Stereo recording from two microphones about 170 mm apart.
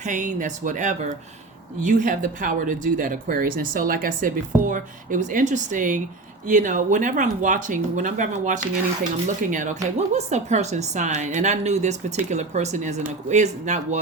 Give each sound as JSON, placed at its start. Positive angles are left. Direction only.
{"t": 0.0, "sound": "speech", "side_deg": -45}